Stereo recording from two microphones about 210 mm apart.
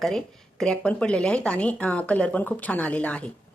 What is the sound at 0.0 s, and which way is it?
Speech, centre (ahead or behind).